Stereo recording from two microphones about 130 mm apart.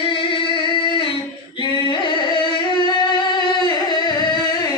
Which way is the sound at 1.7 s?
40° left (ahead or behind).